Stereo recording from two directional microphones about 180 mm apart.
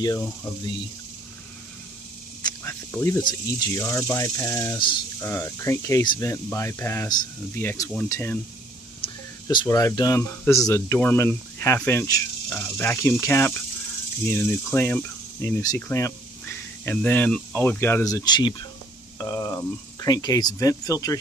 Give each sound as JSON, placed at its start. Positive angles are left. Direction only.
{"t": 0.0, "sound": "speech", "side_deg": 20}
{"t": 2.9, "sound": "speech", "side_deg": 10}
{"t": 9.0, "sound": "speech", "side_deg": 25}